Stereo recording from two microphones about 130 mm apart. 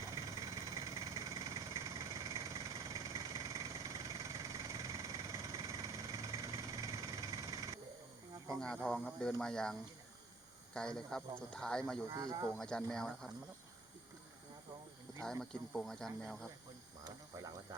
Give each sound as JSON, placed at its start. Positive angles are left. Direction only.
{"t": 0.2, "sound": "vehicle", "side_deg": -25}
{"t": 8.6, "sound": "speech", "side_deg": 5}
{"t": 10.8, "sound": "speech", "side_deg": 5}
{"t": 12.1, "sound": "speech", "side_deg": -30}
{"t": 12.5, "sound": "speech", "side_deg": 5}
{"t": 15.2, "sound": "speech", "side_deg": 0}
{"t": 17.0, "sound": "snake", "side_deg": -25}